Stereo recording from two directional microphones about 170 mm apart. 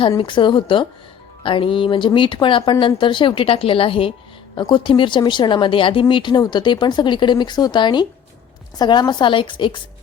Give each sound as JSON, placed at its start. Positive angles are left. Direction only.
{"t": 0.2, "sound": "speech", "side_deg": 30}